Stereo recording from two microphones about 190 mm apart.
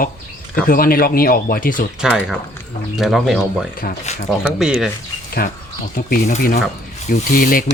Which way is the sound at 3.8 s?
40° left (ahead or behind).